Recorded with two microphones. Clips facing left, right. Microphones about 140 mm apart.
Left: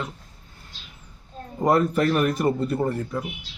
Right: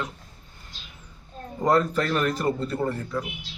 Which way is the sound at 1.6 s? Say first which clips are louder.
Left 2 dB; 20° left (ahead or behind).